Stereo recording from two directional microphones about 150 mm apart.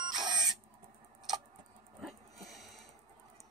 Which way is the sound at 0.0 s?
30° right (ahead or behind).